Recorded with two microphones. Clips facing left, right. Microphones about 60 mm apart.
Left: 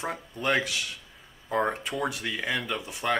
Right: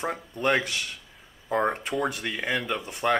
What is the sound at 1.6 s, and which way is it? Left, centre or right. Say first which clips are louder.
Speech: right 2 dB; centre.